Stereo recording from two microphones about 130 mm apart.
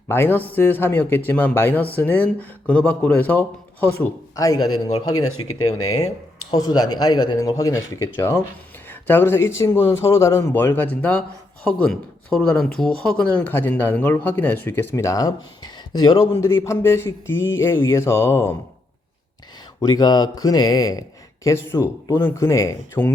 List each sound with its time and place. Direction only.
0.1 s speech: 15° left (ahead or behind)
4.4 s music: 30° left (ahead or behind)
6.5 s music: 30° left (ahead or behind)
8.9 s speech: 15° left (ahead or behind)
9.9 s music: 20° left (ahead or behind)
10.5 s speech: 15° left (ahead or behind); by 16.4 s 30° left (ahead or behind)
16.4 s music: 20° left (ahead or behind)
19.8 s speech: 30° left (ahead or behind)
21.4 s music: 20° left (ahead or behind)
22.1 s speech: 35° left (ahead or behind)
22.4 s music: 25° left (ahead or behind)